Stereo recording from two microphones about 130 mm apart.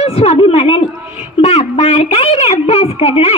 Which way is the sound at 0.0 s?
50° left (ahead or behind).